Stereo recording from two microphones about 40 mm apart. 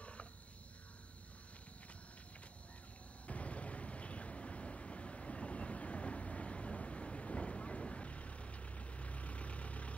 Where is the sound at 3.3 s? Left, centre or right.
Left.